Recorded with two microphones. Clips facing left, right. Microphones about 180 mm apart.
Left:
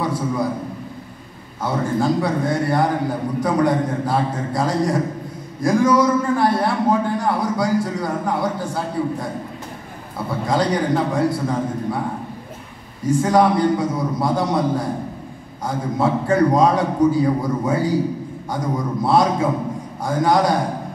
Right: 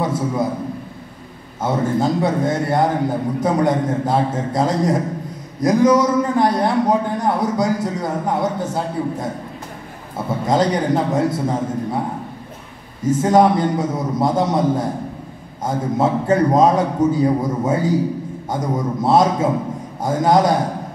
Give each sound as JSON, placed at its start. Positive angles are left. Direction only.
{"t": 0.0, "sound": "a man's voice", "side_deg": -20}
{"t": 1.6, "sound": "a man's voice", "side_deg": -20}
{"t": 13.0, "sound": "a man's voice", "side_deg": -20}